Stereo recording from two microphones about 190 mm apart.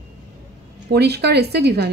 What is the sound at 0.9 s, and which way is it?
A woman's voice, 60° right (ahead or behind).